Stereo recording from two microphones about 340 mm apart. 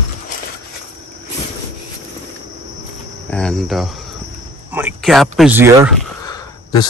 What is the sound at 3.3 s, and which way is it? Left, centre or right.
Speech, centre.